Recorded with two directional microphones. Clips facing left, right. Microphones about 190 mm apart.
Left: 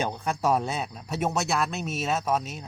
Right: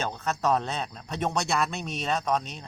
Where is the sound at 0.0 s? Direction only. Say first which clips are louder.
Left 1 dB; 10° left (ahead or behind).